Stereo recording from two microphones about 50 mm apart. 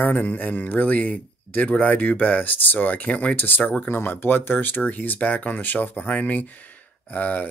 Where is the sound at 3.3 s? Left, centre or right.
Left.